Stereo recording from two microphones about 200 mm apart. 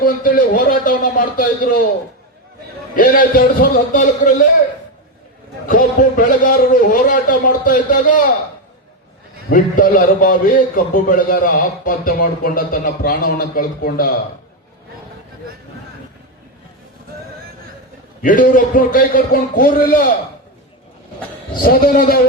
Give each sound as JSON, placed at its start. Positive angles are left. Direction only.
{"t": 0.0, "sound": "a man's voice", "side_deg": 45}
{"t": 2.9, "sound": "a man's voice", "side_deg": 45}
{"t": 5.6, "sound": "a man's voice", "side_deg": 45}
{"t": 9.5, "sound": "a man's voice", "side_deg": 45}
{"t": 18.2, "sound": "a man's voice", "side_deg": 40}
{"t": 21.6, "sound": "a man's voice", "side_deg": 45}